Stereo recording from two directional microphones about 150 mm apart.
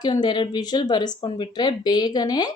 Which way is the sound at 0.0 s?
30° left (ahead or behind).